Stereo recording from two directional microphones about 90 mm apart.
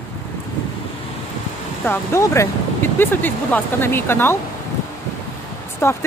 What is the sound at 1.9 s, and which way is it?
Speech, 35° left (ahead or behind).